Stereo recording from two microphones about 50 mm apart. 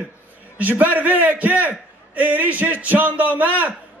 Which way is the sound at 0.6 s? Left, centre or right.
Right.